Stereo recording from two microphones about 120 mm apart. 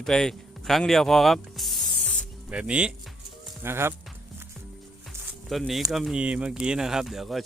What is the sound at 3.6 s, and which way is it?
Speech, 20° right (ahead or behind).